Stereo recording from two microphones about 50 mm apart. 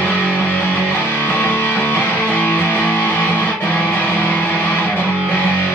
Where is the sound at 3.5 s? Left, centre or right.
Left.